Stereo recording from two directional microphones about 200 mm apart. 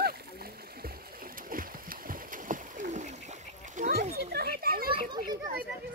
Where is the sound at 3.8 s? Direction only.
50° right (ahead or behind).